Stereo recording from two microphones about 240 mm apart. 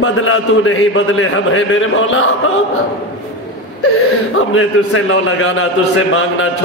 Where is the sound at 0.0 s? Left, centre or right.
Left.